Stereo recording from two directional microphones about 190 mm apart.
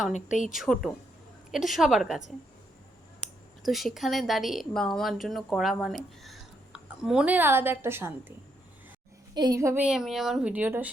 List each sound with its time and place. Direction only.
0.1 s speech: 40° left (ahead or behind)
0.5 s a woman's voice: centre (ahead or behind)
3.6 s a woman's voice: centre (ahead or behind)
9.3 s a woman's voice: 20° right (ahead or behind)